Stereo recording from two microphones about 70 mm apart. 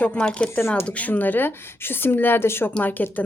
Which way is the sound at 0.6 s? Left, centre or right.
Left.